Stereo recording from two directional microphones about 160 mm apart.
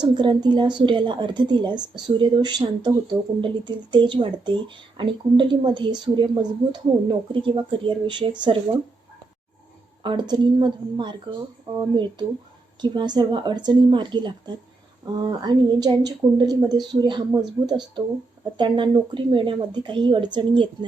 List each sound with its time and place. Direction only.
0.0 s a woman's voice: 30° right (ahead or behind)
10.0 s a woman's voice: 30° right (ahead or behind)